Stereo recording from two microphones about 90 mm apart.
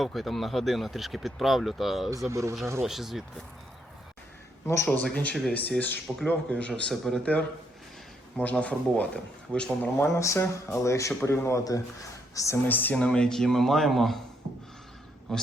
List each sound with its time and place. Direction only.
0.0 s speech: centre (ahead or behind)
2.0 s speech: 35° right (ahead or behind)
2.8 s speech: 5° right (ahead or behind)
4.9 s a man's voice: 15° left (ahead or behind)
8.4 s a man's voice: 15° left (ahead or behind)
10.0 s speech: 30° left (ahead or behind)
12.6 s speech: 20° left (ahead or behind); by 14.2 s centre (ahead or behind)
15.3 s a man's voice: 5° left (ahead or behind)